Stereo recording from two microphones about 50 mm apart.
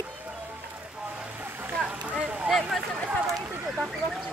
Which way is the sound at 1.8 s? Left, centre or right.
Right.